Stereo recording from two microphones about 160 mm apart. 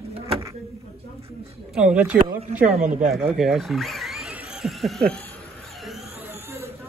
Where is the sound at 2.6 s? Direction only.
50° right (ahead or behind).